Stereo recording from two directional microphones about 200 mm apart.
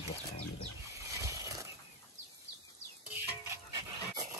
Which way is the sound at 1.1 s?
15° right (ahead or behind).